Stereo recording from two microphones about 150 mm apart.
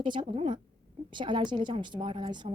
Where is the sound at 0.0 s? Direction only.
30° right (ahead or behind).